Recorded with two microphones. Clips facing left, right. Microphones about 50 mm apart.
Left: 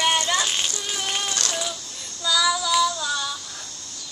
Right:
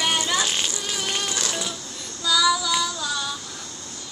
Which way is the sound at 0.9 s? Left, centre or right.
Centre.